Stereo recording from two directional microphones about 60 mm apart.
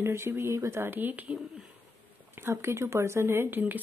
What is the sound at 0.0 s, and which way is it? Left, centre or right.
Speech, right.